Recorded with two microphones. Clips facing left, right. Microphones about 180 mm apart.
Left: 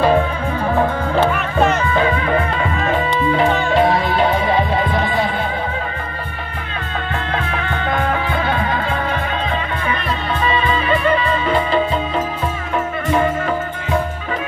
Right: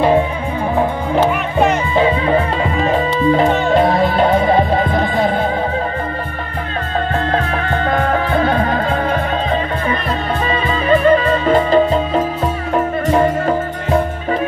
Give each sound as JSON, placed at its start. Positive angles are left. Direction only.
{"t": 0.7, "sound": "music", "side_deg": -15}
{"t": 2.0, "sound": "music", "side_deg": -25}
{"t": 3.7, "sound": "music", "side_deg": -45}
{"t": 7.3, "sound": "music", "side_deg": -40}
{"t": 10.4, "sound": "music", "side_deg": -40}